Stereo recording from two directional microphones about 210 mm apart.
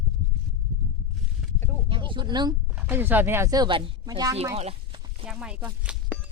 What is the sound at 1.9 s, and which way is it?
Speech, 25° right (ahead or behind).